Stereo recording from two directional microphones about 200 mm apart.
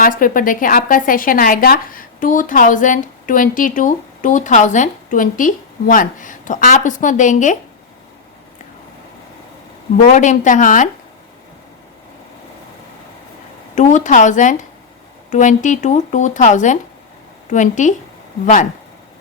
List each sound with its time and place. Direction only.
0.0 s a woman's voice: 45° left (ahead or behind)
10.0 s a woman's voice: 40° left (ahead or behind)
13.7 s a woman's voice: 40° left (ahead or behind)